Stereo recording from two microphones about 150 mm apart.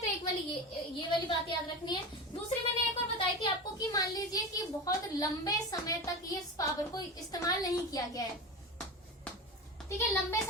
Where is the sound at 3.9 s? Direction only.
25° left (ahead or behind).